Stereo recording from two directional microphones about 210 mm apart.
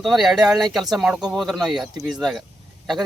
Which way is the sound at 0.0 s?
Centre (ahead or behind).